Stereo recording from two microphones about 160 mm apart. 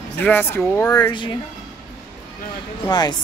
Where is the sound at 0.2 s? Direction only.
10° left (ahead or behind).